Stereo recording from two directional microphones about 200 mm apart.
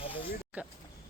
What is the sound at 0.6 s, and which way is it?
Speech, 5° right (ahead or behind).